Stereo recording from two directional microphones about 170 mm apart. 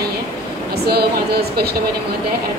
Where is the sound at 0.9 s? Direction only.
70° right (ahead or behind).